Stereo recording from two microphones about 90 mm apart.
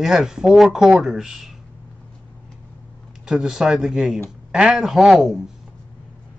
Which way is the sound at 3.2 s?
5° right (ahead or behind).